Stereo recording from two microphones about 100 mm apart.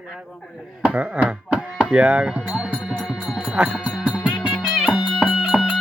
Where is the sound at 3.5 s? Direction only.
10° right (ahead or behind).